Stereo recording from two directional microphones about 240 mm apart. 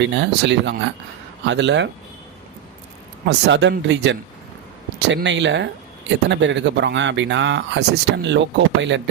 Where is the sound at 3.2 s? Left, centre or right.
Right.